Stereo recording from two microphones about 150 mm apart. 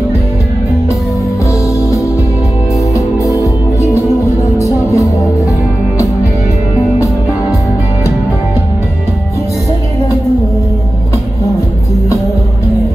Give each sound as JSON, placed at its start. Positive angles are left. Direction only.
{"t": 3.3, "sound": "music", "side_deg": 20}